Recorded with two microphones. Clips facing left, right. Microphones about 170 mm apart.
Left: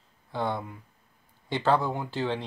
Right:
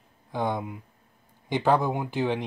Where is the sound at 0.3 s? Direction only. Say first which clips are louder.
Right 2 dB; 15° right (ahead or behind).